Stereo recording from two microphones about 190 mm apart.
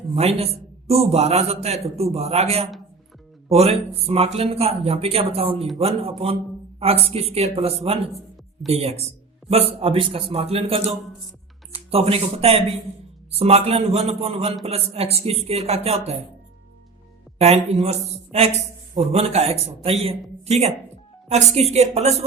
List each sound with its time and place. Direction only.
0.1 s a man's voice: 30° right (ahead or behind)
17.3 s a man's voice: 35° right (ahead or behind)